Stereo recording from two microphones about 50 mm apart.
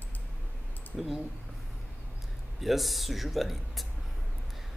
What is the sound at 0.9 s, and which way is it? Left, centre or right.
Speech, centre.